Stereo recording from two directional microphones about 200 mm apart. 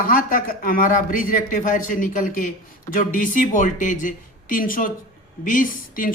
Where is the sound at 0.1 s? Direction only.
45° left (ahead or behind).